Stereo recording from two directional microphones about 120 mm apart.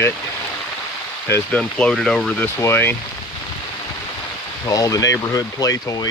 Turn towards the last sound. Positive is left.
turn(degrees=30)  # may be behind; listen again after turning